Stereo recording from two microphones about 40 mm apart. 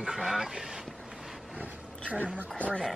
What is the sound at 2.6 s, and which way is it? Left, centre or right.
Speech, left.